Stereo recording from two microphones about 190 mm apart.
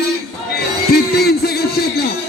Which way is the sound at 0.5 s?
55° left (ahead or behind).